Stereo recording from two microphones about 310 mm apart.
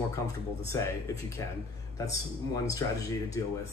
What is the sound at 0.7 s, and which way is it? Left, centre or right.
Speech, centre.